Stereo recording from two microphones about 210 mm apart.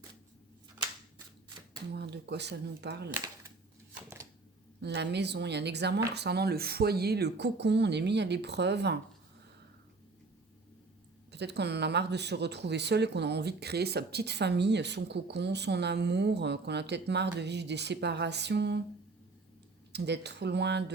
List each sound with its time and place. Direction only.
1.9 s speech: 55° right (ahead or behind)
3.1 s speech: 15° right (ahead or behind)
4.8 s speech: 55° right (ahead or behind)
11.3 s speech: 55° right (ahead or behind)
19.9 s speech: 55° right (ahead or behind)